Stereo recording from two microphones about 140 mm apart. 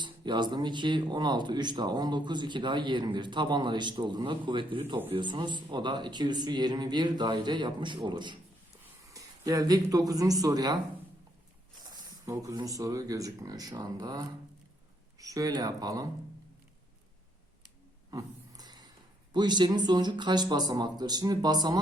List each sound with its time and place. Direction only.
0.0 s speech: 35° right (ahead or behind)
11.8 s speech: 25° right (ahead or behind)
18.1 s a sound: 25° right (ahead or behind)
19.3 s speech: 30° right (ahead or behind)